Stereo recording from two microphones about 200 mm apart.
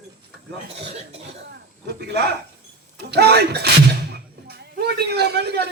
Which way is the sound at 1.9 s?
55° right (ahead or behind).